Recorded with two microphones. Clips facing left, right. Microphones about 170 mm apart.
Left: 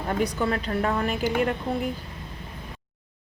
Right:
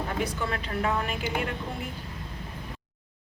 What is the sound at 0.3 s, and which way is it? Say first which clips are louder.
A woman's voice: left 5 dB; 40° left (ahead or behind).